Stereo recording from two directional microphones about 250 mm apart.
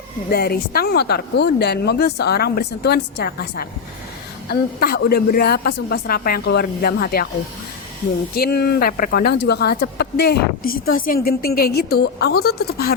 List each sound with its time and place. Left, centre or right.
0.3 s speech: left
8.4 s speech: left